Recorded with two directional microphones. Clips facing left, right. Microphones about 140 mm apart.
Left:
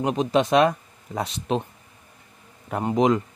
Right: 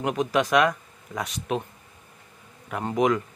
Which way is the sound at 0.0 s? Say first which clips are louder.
Left 3 dB; 25° left (ahead or behind).